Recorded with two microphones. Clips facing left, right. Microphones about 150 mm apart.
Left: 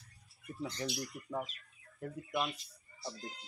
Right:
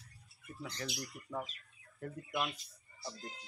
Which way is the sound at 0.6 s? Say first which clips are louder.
Left 4 dB; 25° left (ahead or behind).